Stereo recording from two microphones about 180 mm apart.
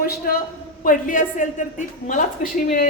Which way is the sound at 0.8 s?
50° left (ahead or behind).